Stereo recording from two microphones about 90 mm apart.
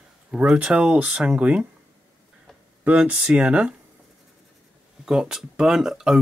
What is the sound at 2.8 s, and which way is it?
Speech, 15° right (ahead or behind).